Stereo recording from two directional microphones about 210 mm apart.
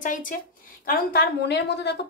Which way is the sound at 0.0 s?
40° left (ahead or behind).